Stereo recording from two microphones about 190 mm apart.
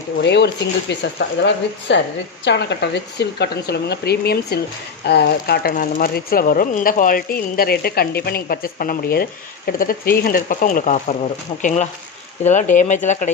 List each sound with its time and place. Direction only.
0.2 s speech: 65° left (ahead or behind); by 13.3 s 40° left (ahead or behind)